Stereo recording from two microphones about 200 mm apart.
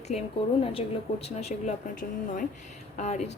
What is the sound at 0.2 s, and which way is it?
A woman's voice, 30° left (ahead or behind).